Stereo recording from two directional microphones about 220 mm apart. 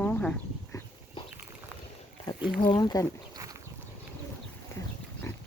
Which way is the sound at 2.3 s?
15° left (ahead or behind).